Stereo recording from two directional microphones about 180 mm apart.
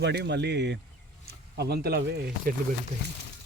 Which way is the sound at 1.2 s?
60° right (ahead or behind).